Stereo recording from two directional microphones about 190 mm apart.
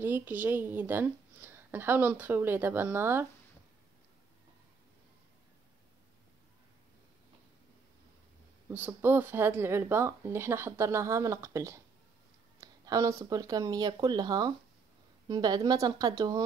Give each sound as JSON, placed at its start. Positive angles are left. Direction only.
{"t": 0.0, "sound": "a woman's voice", "side_deg": -10}
{"t": 8.6, "sound": "a woman's voice", "side_deg": -10}